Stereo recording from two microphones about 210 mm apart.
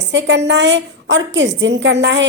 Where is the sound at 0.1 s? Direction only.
55° right (ahead or behind).